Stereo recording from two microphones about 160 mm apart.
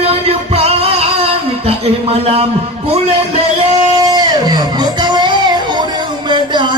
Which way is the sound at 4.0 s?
25° right (ahead or behind).